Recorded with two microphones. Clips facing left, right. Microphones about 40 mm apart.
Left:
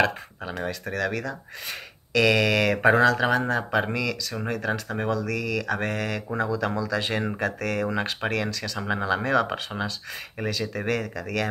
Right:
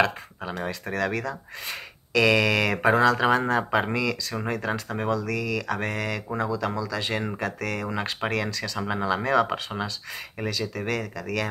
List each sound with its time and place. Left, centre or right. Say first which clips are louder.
0.0 s speech: even; centre
0.7 s speech: even; centre